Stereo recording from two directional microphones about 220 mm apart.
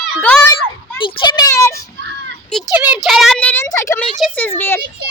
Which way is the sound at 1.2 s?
20° left (ahead or behind).